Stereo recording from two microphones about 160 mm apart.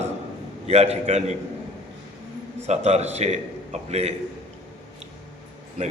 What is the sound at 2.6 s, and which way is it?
A man's voice, 45° right (ahead or behind).